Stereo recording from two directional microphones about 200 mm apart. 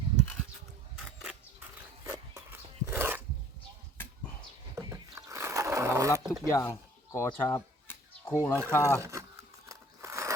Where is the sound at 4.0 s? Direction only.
10° left (ahead or behind).